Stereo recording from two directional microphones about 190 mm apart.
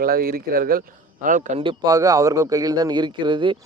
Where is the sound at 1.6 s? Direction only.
25° right (ahead or behind).